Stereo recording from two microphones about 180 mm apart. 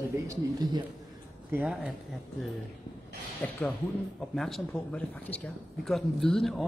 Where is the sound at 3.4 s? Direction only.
10° left (ahead or behind).